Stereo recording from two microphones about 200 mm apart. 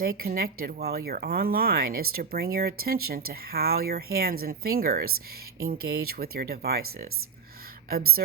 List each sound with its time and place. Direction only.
0.0 s speech: 50° right (ahead or behind)